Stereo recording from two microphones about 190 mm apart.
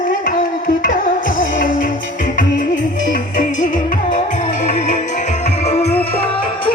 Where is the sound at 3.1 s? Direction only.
40° left (ahead or behind).